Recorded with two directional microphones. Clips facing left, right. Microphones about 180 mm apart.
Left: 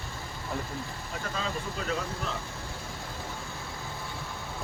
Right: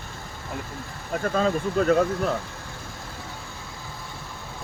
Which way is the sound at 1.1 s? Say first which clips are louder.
Right 13 dB; 55° right (ahead or behind).